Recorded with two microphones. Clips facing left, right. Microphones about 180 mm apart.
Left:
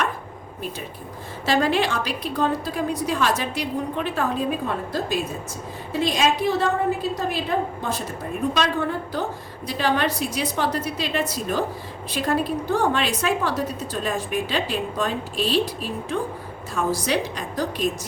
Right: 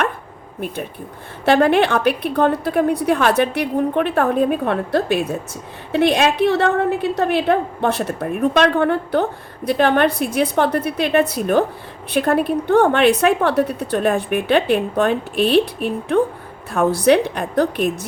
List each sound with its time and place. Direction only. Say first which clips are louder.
1.5 s a woman's voice: right 7 dB; 60° right (ahead or behind)